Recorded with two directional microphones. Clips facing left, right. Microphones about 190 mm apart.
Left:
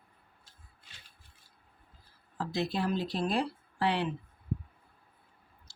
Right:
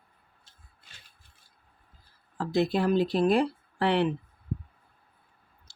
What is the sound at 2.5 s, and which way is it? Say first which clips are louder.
Speech: right 7 dB; 55° right (ahead or behind).